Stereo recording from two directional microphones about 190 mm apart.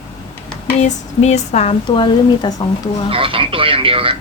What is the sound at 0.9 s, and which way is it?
Speech, 35° left (ahead or behind).